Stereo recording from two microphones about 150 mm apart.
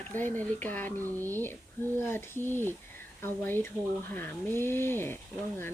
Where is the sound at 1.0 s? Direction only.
20° right (ahead or behind).